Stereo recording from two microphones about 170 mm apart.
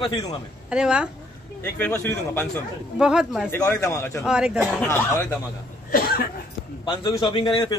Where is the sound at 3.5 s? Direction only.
15° left (ahead or behind).